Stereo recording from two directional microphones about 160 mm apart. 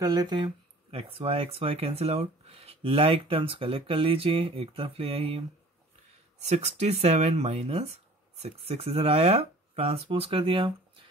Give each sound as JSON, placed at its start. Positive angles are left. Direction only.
{"t": 0.0, "sound": "speech", "side_deg": -25}
{"t": 6.4, "sound": "speech", "side_deg": -45}